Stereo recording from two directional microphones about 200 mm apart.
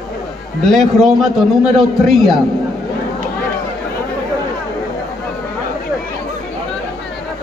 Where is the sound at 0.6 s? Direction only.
Centre (ahead or behind).